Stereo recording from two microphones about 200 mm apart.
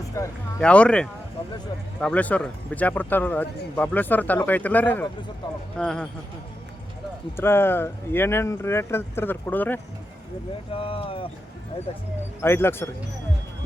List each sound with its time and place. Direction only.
0.1 s speech: 15° left (ahead or behind)
7.3 s speech: 10° left (ahead or behind)
10.7 s speech: 30° left (ahead or behind)
12.4 s speech: 10° left (ahead or behind)